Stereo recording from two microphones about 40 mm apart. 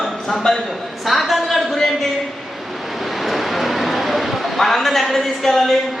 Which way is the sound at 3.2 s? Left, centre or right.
Centre.